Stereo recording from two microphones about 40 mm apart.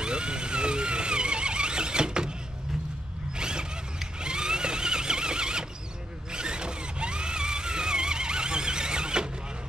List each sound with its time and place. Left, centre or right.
0.0 s vehicle: right
3.3 s zipper: centre
4.2 s a sound: right
6.3 s zipper: right